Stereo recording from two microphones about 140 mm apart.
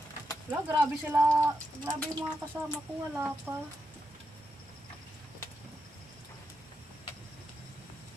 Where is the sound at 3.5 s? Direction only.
10° right (ahead or behind).